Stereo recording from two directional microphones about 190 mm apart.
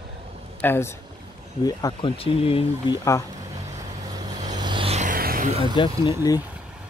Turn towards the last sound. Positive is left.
turn(degrees=25)  # may be behind; listen again after turning